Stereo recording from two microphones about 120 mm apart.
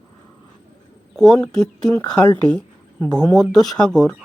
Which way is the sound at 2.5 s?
10° left (ahead or behind).